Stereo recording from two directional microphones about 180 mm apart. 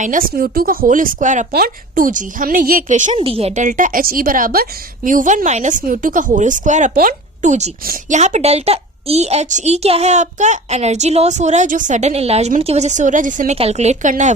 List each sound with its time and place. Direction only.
0.0 s speech: 50° right (ahead or behind)